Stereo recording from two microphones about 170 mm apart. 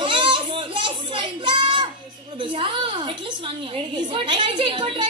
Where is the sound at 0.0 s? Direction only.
30° right (ahead or behind).